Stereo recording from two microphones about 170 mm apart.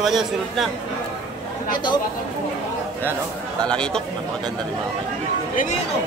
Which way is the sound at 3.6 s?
5° left (ahead or behind).